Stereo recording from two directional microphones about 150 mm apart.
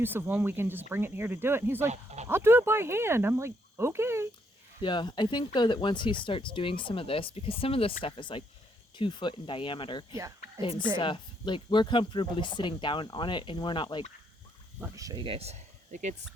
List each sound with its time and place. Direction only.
0.0 s speech: 15° right (ahead or behind)
4.8 s speech: 30° left (ahead or behind)
14.9 s speech: 25° right (ahead or behind)
15.2 s speech: 40° right (ahead or behind)